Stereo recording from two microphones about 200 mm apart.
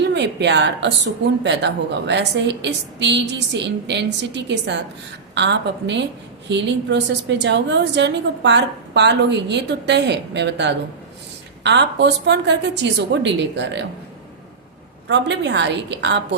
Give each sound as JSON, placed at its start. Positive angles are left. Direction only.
{"t": 0.0, "sound": "a woman's voice", "side_deg": -60}
{"t": 15.0, "sound": "a woman's voice", "side_deg": -60}